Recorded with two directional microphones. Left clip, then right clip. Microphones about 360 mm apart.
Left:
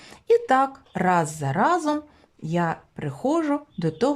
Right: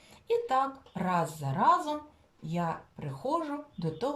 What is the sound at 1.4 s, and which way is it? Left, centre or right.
Speech, left.